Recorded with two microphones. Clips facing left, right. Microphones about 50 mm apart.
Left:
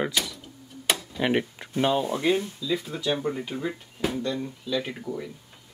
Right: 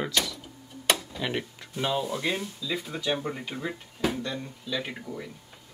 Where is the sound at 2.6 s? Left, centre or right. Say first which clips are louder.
Left 3 dB; centre.